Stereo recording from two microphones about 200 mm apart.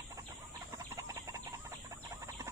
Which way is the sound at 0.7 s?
15° right (ahead or behind).